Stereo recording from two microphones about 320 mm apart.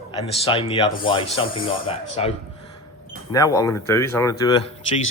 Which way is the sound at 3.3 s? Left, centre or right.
Centre.